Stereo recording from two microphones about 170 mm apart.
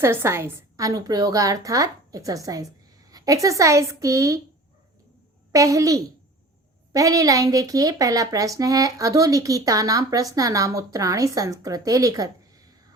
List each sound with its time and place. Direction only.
0.0 s a woman's voice: 15° right (ahead or behind)
5.5 s a woman's voice: 20° right (ahead or behind)